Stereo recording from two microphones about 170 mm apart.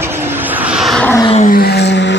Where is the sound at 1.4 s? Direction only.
65° left (ahead or behind); by 2.2 s 90° left.